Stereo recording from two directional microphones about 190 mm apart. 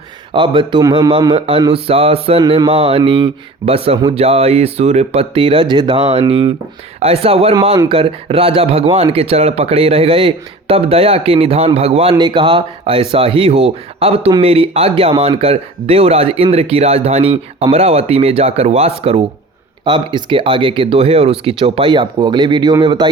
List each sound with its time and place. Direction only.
0.3 s speech: 25° right (ahead or behind)